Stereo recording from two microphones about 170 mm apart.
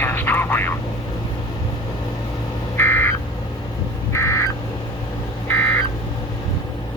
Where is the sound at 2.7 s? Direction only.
15° left (ahead or behind).